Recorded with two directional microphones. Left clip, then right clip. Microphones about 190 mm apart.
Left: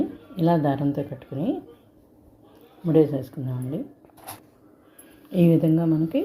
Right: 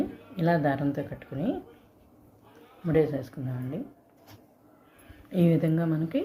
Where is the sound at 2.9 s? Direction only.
20° left (ahead or behind).